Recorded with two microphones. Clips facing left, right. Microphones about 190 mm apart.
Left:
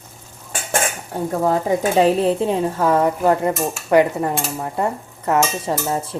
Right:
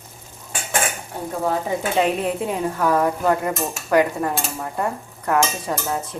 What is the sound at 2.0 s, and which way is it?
Cutlery, 30° left (ahead or behind).